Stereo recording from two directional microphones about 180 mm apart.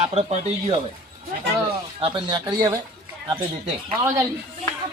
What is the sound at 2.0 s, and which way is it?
Speech, 30° right (ahead or behind).